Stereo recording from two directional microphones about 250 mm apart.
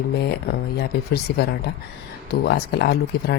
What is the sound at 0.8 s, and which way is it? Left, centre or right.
Speech, left.